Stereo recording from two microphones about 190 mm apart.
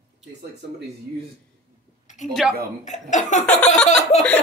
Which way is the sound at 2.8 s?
40° left (ahead or behind).